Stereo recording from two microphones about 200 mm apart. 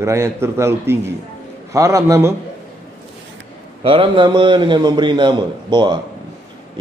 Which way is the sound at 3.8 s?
25° right (ahead or behind).